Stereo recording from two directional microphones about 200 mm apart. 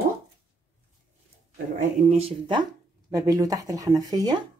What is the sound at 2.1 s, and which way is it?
Speech, 30° right (ahead or behind).